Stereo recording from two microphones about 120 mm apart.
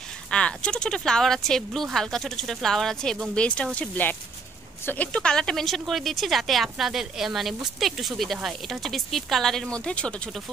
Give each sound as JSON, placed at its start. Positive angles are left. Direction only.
{"t": 0.3, "sound": "a woman's voice", "side_deg": 10}